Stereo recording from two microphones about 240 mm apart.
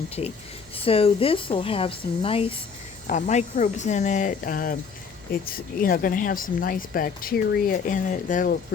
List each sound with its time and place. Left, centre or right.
0.8 s speech: left